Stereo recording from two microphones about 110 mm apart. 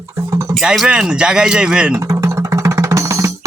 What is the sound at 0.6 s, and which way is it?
Speech, 5° right (ahead or behind).